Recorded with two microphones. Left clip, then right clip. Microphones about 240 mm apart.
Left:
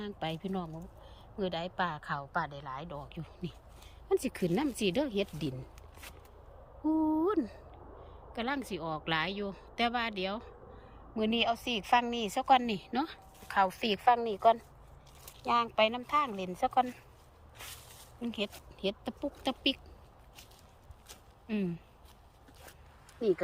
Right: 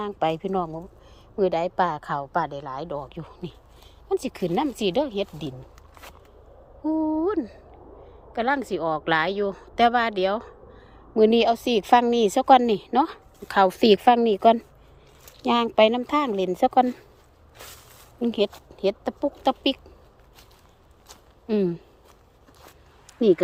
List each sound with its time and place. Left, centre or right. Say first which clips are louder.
0.0 s a woman's voice: right 13 dB; centre
0.6 s speech: right 14 dB; right
1.4 s a woman's voice: right 12 dB; right; by 5.5 s centre
5.9 s a sound: right 7 dB; centre
6.8 s a woman's voice: right 6 dB; centre
13.5 s speech: right 12 dB; right
15.4 s speech: right 9 dB; right
17.6 s a sound: right 4 dB; centre
18.5 s a woman's voice: right 11 dB; centre
21.4 s speech: right 14 dB; right